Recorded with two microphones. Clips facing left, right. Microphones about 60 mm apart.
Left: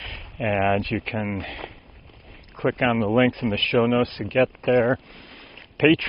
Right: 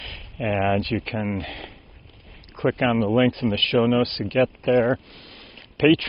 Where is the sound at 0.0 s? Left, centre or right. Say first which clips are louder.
Left 1 dB; centre.